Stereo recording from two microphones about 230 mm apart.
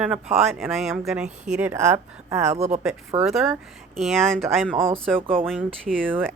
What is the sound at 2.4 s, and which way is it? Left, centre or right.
Speech, right.